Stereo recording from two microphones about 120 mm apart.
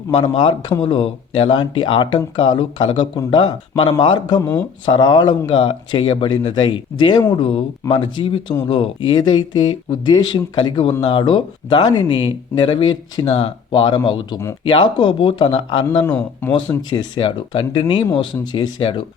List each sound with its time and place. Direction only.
0.2 s speech: 45° left (ahead or behind)
16.0 s speech: 15° left (ahead or behind)
16.5 s speech: 40° left (ahead or behind)